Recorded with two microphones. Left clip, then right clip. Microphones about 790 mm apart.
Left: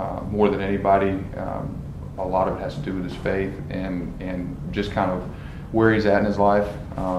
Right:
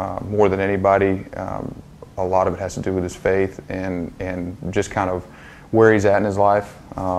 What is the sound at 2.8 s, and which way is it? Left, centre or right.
Speech, right.